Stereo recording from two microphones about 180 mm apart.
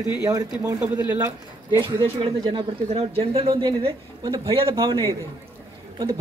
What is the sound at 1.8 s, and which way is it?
A man's voice, 25° right (ahead or behind).